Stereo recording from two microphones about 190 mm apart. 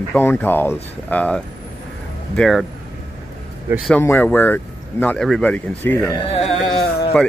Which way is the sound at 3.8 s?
10° left (ahead or behind).